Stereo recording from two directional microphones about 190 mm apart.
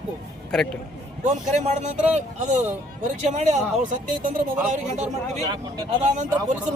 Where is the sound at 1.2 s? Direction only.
40° right (ahead or behind).